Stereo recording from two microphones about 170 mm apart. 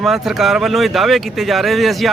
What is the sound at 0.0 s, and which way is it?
Speech, centre (ahead or behind).